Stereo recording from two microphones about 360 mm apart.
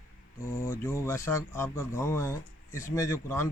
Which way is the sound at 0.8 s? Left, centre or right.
Centre.